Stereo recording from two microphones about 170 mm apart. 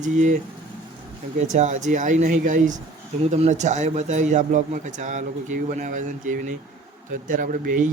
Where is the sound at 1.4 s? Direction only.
45° right (ahead or behind).